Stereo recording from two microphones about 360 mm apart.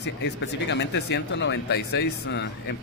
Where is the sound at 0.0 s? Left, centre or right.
Left.